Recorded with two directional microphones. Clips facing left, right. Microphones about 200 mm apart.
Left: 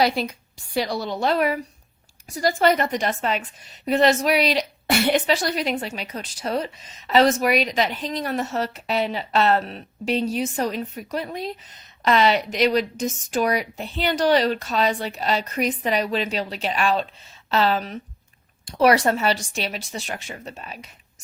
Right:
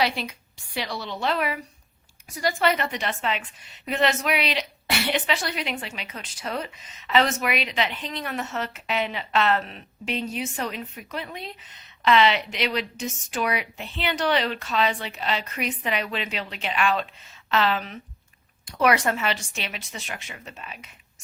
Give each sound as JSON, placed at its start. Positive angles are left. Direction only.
{"t": 0.0, "sound": "a woman's voice", "side_deg": 40}